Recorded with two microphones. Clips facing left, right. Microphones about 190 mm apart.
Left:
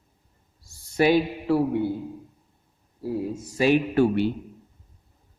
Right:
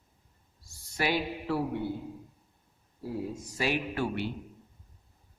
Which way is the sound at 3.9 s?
35° left (ahead or behind).